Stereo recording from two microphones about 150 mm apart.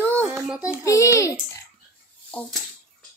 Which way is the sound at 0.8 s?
20° left (ahead or behind).